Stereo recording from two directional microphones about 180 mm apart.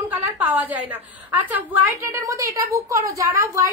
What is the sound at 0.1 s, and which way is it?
A woman's voice, 10° right (ahead or behind).